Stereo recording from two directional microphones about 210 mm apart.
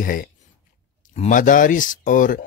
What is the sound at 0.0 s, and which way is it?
Speech, 40° left (ahead or behind).